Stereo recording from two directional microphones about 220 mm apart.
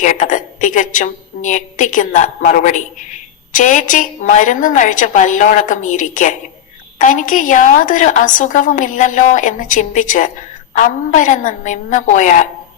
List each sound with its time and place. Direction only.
0.0 s a woman's voice: 35° left (ahead or behind)